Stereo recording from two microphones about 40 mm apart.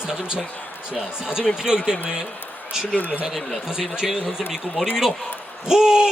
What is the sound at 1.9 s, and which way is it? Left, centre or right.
Speech, centre.